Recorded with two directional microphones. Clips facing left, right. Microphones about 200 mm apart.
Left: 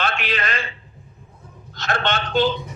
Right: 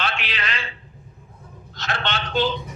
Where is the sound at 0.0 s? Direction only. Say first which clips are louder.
Left 4 dB; 50° left (ahead or behind).